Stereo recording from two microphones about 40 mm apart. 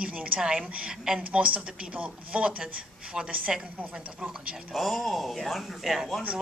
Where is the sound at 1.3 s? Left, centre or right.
Right; by 3.6 s centre.